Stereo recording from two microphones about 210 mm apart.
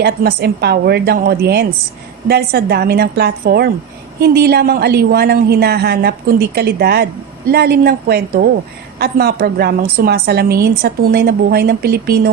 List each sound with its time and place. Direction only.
0.0 s a woman's voice: 50° right (ahead or behind)